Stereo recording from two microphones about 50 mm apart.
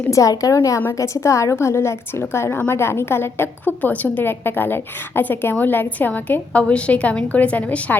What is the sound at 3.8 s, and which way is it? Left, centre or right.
A woman's voice, left.